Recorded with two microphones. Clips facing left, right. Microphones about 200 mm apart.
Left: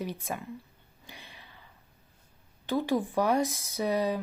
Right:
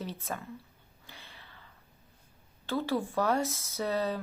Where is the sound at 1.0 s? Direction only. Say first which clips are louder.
Left 3 dB; 15° left (ahead or behind).